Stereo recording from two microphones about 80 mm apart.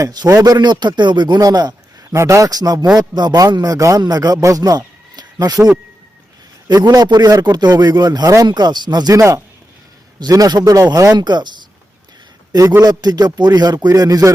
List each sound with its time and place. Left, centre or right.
0.0 s a man's voice: right
0.3 s a man's voice: right
2.1 s a man's voice: right
8.4 s a man's voice: right
12.8 s a man's voice: right